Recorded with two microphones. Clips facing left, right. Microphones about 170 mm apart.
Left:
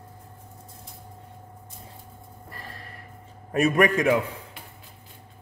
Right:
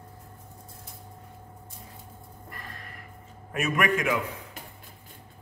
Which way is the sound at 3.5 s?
35° left (ahead or behind).